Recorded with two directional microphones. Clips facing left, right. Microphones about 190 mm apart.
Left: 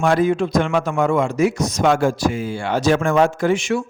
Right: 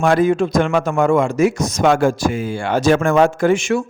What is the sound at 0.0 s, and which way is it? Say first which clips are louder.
A man's voice: right 2 dB; 50° right (ahead or behind).